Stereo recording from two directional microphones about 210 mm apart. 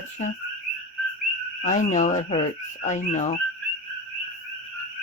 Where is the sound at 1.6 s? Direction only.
35° left (ahead or behind).